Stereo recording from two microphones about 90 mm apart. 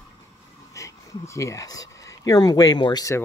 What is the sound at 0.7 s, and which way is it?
Speech, 35° left (ahead or behind).